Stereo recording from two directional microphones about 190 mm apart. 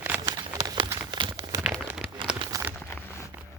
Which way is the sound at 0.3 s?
20° right (ahead or behind).